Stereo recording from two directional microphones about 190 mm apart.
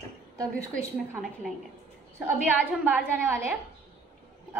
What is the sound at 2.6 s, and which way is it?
Speech, 10° right (ahead or behind).